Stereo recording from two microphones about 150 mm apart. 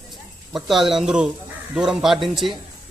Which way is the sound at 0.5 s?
Centre (ahead or behind).